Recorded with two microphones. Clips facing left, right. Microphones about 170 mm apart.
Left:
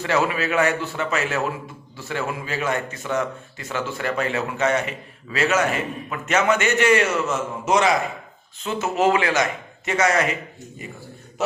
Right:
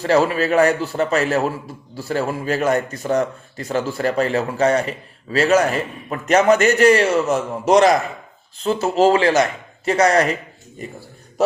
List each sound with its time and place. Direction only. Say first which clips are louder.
0.0 s a man's voice: right 5 dB; 35° right (ahead or behind)